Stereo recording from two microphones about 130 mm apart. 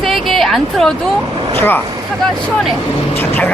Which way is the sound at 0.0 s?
Centre (ahead or behind).